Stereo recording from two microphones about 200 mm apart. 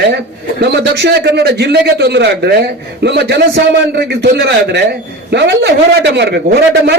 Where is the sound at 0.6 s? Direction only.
55° right (ahead or behind).